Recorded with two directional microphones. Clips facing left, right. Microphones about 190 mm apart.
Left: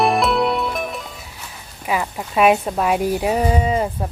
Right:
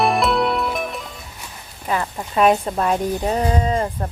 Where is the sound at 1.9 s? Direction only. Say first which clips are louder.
Left 1 dB; 5° left (ahead or behind).